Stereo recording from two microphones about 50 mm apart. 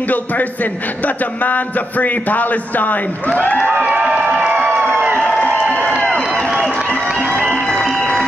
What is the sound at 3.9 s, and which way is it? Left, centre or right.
Crowd, centre.